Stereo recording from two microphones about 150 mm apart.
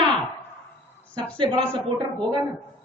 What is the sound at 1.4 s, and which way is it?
Speech, 30° right (ahead or behind).